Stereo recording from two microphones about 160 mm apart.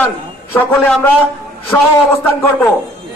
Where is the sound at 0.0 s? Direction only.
10° left (ahead or behind).